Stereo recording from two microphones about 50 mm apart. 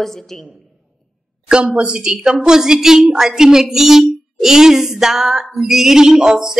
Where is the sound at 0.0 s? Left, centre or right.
Centre.